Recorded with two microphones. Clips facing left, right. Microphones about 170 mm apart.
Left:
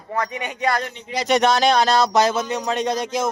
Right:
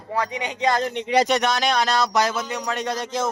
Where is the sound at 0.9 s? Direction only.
70° right (ahead or behind).